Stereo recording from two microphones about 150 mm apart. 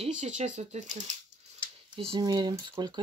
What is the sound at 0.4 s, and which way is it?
Speech, 50° right (ahead or behind).